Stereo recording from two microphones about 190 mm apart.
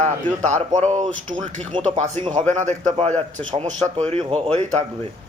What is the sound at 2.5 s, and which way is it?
A man's voice, 40° right (ahead or behind).